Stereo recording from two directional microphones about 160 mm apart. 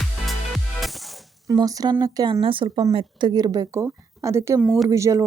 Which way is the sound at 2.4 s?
35° right (ahead or behind).